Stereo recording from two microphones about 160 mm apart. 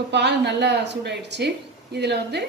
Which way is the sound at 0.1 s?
90° right.